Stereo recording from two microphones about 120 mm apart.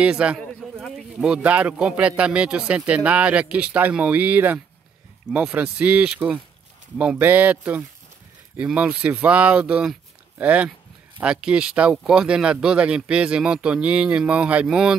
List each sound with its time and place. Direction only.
0.0 s speech: 10° right (ahead or behind)
0.7 s a sound: 5° left (ahead or behind)
1.1 s speech: 5° right (ahead or behind)